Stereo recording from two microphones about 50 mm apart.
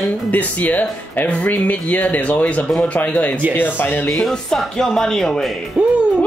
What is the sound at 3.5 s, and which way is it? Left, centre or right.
Speech, left.